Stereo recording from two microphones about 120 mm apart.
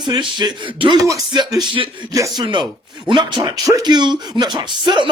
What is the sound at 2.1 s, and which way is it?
Speech, 25° right (ahead or behind).